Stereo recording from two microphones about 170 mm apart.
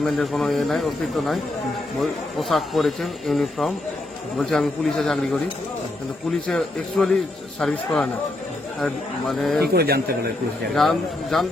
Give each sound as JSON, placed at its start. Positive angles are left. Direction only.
{"t": 0.0, "sound": "speech", "side_deg": 0}
{"t": 6.5, "sound": "speech", "side_deg": 0}
{"t": 9.7, "sound": "speech", "side_deg": -65}
{"t": 10.8, "sound": "speech", "side_deg": 0}